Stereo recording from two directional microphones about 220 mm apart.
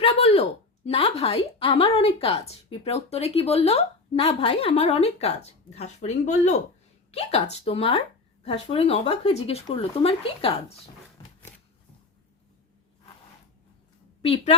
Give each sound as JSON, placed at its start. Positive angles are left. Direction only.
{"t": 0.0, "sound": "a sound", "side_deg": 25}
{"t": 0.9, "sound": "a woman's voice", "side_deg": 25}
{"t": 14.2, "sound": "a woman's voice", "side_deg": 25}